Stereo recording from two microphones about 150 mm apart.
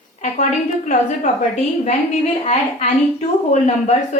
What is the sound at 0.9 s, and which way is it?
A woman's voice, 55° left (ahead or behind).